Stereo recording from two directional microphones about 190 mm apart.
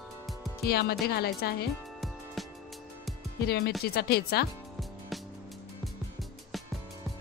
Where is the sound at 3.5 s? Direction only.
55° left (ahead or behind).